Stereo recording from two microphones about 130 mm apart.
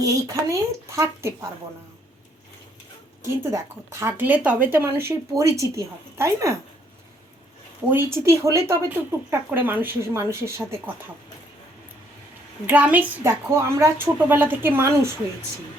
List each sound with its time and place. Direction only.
0.0 s speech: 25° right (ahead or behind)
3.2 s speech: 20° right (ahead or behind)
7.9 s speech: 20° right (ahead or behind)
12.6 s a woman's voice: 15° right (ahead or behind)